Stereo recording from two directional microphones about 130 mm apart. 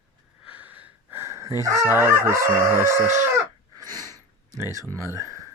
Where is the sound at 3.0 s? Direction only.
65° right (ahead or behind).